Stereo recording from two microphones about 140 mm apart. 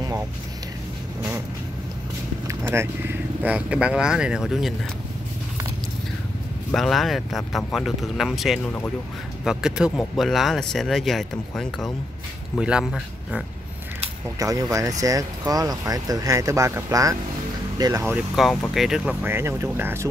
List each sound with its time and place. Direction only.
2.7 s speech: 15° right (ahead or behind)
6.7 s speech: centre (ahead or behind)
14.4 s speech: 25° right (ahead or behind)
18.1 s speech: centre (ahead or behind); by 20.1 s 20° right (ahead or behind)